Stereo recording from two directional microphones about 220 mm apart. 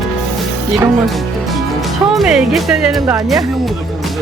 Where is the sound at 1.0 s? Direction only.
Centre (ahead or behind).